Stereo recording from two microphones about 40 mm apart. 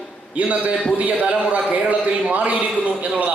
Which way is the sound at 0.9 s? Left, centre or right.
Right.